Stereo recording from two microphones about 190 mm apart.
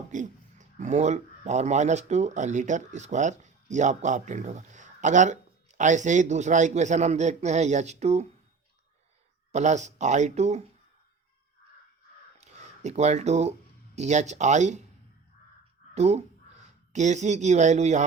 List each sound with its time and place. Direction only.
0.1 s speech: 40° right (ahead or behind)
9.5 s speech: 35° right (ahead or behind)
12.4 s a sound: 35° right (ahead or behind)
13.9 s speech: 35° right (ahead or behind)
16.0 s speech: 35° right (ahead or behind)